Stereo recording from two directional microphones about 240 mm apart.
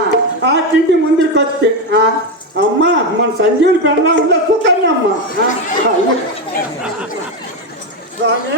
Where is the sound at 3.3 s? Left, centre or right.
Right.